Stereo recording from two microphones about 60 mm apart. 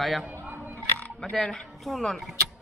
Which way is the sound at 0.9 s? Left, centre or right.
Left.